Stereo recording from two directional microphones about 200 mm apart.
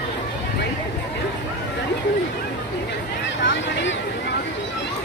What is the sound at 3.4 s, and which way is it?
Speech, 65° left (ahead or behind).